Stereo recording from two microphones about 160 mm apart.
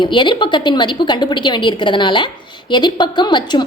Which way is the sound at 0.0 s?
30° left (ahead or behind).